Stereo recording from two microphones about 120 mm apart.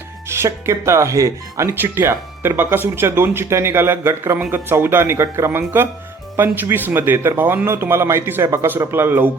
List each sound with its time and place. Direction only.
0.3 s speech: 20° right (ahead or behind)